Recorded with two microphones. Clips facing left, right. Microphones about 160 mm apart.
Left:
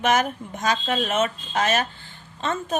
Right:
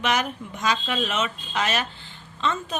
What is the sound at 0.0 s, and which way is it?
Speech, 45° left (ahead or behind).